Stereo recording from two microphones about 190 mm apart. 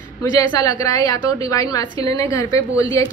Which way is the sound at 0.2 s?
20° left (ahead or behind).